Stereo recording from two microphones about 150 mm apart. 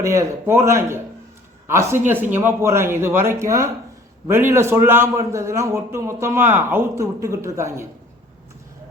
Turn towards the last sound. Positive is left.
turn(degrees=-20)  # may be behind; listen again after turning